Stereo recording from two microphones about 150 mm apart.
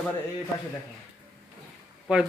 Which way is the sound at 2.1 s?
5° right (ahead or behind).